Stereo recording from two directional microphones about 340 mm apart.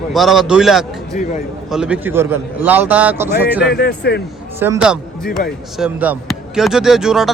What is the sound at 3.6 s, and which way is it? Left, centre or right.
Speech, left.